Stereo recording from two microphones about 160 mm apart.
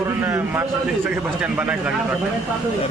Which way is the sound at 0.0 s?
20° right (ahead or behind).